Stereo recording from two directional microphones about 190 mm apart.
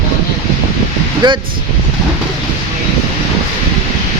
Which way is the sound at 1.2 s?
25° right (ahead or behind).